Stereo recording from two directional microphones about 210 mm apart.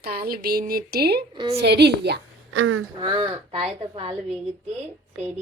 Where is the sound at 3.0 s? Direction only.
20° right (ahead or behind).